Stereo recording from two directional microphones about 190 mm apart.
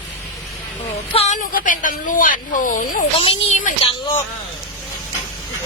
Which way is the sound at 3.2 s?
30° left (ahead or behind).